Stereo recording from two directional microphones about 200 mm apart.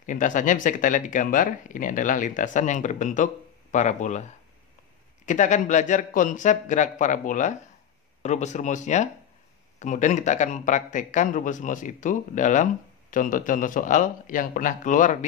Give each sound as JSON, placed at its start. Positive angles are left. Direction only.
{"t": 0.0, "sound": "speech", "side_deg": 40}
{"t": 5.2, "sound": "speech", "side_deg": 40}